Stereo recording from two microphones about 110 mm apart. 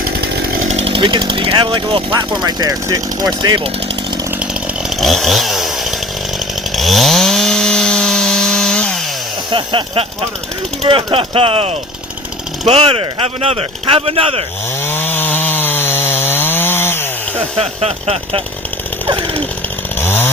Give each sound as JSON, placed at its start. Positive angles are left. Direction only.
{"t": 0.7, "sound": "speech", "side_deg": -70}
{"t": 2.4, "sound": "speech", "side_deg": -40}
{"t": 4.9, "sound": "chainsaw", "side_deg": 0}
{"t": 9.5, "sound": "speech", "side_deg": -45}
{"t": 14.8, "sound": "chainsaw", "side_deg": 20}
{"t": 17.6, "sound": "speech", "side_deg": -65}
{"t": 20.0, "sound": "chainsaw", "side_deg": 20}